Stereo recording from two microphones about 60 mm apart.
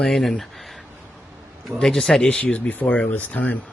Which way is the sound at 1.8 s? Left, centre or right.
Centre.